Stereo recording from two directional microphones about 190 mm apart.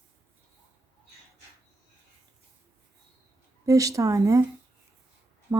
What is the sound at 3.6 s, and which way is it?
Speech, 15° right (ahead or behind).